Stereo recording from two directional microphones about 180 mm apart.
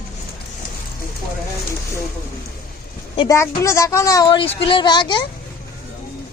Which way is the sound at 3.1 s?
25° left (ahead or behind).